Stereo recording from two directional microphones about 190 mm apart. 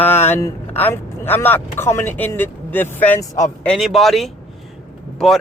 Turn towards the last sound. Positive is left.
turn(degrees=0)  # may be behind; listen again after turning